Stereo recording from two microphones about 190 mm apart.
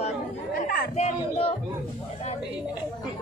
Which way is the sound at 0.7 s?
45° left (ahead or behind).